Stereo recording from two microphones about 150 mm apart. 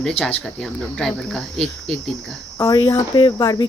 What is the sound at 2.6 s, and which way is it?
Speech, 25° left (ahead or behind).